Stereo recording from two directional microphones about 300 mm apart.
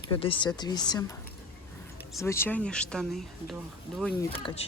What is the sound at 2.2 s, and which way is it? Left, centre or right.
Speech, centre.